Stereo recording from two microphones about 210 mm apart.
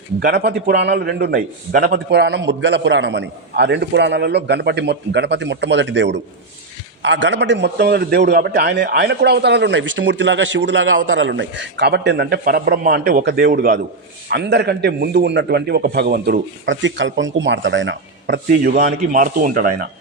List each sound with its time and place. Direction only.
0.2 s a man's voice: 50° right (ahead or behind)
2.0 s a man's voice: 55° right (ahead or behind)
14.3 s a man's voice: 55° right (ahead or behind)